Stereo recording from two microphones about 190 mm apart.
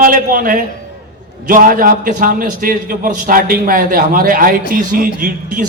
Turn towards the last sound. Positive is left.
turn(degrees=-45)  # may be behind; listen again after turning